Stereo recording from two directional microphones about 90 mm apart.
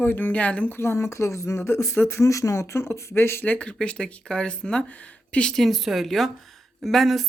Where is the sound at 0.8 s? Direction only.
30° left (ahead or behind).